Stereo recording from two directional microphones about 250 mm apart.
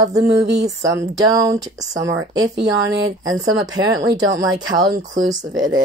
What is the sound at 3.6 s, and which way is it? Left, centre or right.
Speech, centre.